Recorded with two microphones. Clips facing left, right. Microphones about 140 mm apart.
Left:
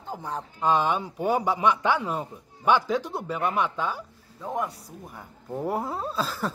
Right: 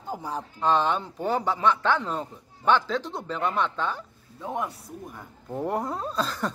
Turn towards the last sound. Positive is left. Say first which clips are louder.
# even
turn(degrees=5)  # may be behind; listen again after turning